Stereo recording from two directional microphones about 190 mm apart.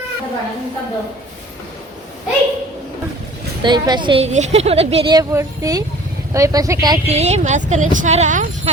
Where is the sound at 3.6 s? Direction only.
25° right (ahead or behind).